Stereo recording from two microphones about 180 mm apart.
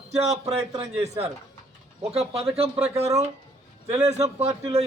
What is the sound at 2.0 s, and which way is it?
Speech, 35° right (ahead or behind).